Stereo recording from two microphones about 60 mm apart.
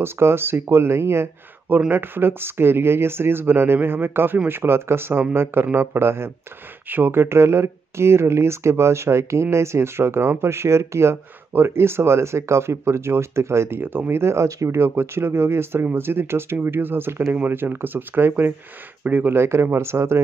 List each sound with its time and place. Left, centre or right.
0.0 s speech: right